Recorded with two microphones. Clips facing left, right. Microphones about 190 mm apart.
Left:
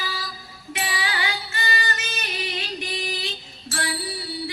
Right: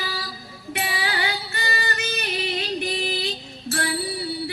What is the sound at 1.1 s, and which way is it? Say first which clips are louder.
Music: right 2 dB; 35° right (ahead or behind).